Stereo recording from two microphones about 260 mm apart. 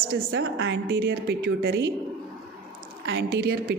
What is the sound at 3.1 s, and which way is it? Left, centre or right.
Speech, right.